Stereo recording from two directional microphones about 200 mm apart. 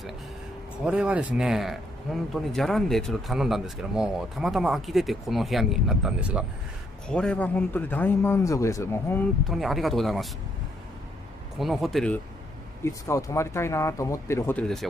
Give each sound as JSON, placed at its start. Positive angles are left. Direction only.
{"t": 0.8, "sound": "a man's voice", "side_deg": -5}
{"t": 9.5, "sound": "speech", "side_deg": 0}
{"t": 11.5, "sound": "speech", "side_deg": 0}
{"t": 12.8, "sound": "a man's voice", "side_deg": 15}